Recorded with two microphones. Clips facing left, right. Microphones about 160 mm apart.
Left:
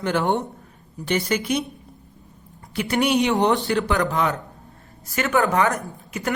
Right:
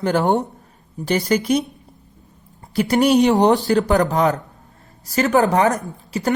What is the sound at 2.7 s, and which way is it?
Speech, 40° right (ahead or behind).